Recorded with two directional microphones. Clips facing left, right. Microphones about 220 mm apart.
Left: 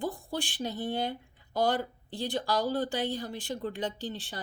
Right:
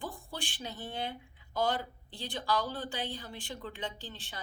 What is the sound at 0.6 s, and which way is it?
Speech, 40° left (ahead or behind).